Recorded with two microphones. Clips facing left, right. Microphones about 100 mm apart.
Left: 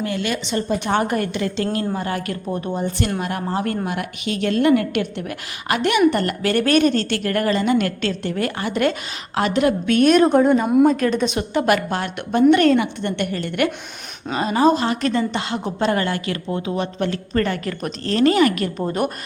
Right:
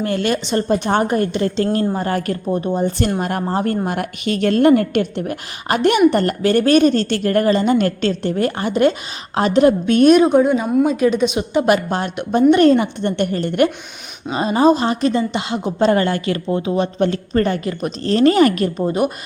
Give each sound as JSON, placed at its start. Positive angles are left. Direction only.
{"t": 0.0, "sound": "a woman's voice", "side_deg": -45}
{"t": 1.0, "sound": "speech", "side_deg": -30}
{"t": 2.5, "sound": "a woman's voice", "side_deg": -20}
{"t": 2.7, "sound": "speech", "side_deg": -35}
{"t": 3.8, "sound": "speech", "side_deg": -45}
{"t": 10.2, "sound": "a woman's voice", "side_deg": -5}
{"t": 15.8, "sound": "a woman's voice", "side_deg": -30}
{"t": 18.9, "sound": "a woman's voice", "side_deg": -15}